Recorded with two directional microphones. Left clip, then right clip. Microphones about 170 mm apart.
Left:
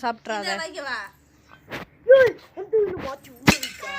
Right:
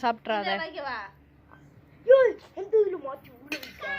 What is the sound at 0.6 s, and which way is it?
Speech, 90° left.